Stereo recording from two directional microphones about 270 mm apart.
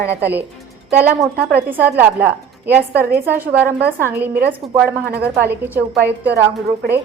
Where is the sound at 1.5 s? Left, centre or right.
Centre.